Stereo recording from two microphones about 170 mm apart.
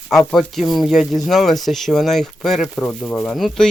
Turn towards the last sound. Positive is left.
turn(degrees=0)  # may be behind; listen again after turning